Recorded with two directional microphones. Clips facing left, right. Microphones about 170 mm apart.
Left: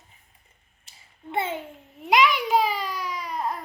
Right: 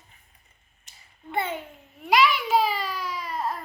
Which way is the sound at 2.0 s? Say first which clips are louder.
Left 1 dB; 15° left (ahead or behind).